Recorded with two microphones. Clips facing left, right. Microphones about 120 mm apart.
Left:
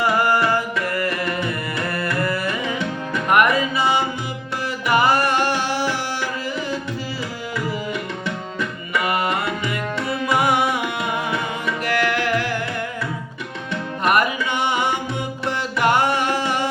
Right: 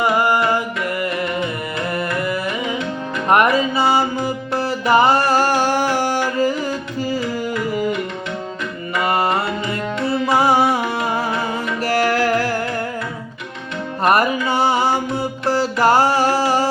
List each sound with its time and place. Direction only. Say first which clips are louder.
0.0 s music: right 2 dB; 15° right (ahead or behind)
3.2 s music: right 2 dB; 30° right (ahead or behind)
9.0 s tabla: right 3 dB; 30° right (ahead or behind)
10.1 s music: right 4 dB; 30° right (ahead or behind)
14.0 s music: right 3 dB; 35° right (ahead or behind)